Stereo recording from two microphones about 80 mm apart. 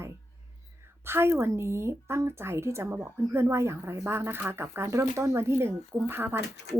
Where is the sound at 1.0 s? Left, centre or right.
Right.